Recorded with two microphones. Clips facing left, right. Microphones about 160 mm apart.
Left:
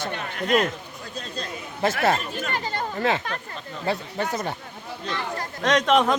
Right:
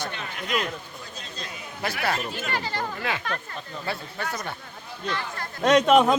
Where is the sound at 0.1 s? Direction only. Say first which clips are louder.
Left 7 dB; 50° left (ahead or behind).